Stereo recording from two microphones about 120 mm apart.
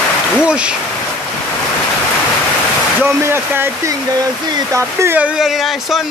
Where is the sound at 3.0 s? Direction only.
20° right (ahead or behind).